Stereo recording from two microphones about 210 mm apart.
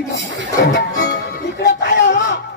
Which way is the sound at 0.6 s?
55° left (ahead or behind).